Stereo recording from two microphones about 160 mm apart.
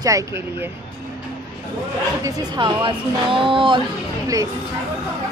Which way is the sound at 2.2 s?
25° right (ahead or behind).